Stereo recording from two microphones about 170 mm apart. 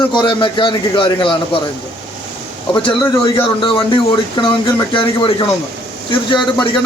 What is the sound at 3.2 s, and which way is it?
Speech, 30° left (ahead or behind).